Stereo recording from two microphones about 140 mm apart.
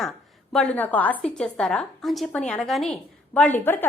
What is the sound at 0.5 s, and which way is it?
A woman's voice, 10° left (ahead or behind).